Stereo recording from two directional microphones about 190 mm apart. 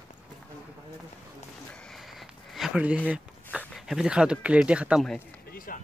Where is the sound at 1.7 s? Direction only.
5° left (ahead or behind).